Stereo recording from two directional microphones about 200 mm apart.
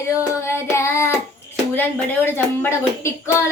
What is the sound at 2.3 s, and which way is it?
Speech, 10° left (ahead or behind).